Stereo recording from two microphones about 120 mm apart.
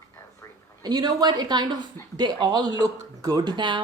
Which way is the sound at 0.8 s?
35° right (ahead or behind).